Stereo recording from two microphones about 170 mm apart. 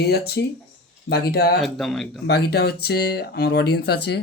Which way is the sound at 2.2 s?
70° left (ahead or behind).